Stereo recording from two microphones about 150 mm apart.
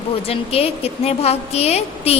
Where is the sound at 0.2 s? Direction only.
40° left (ahead or behind).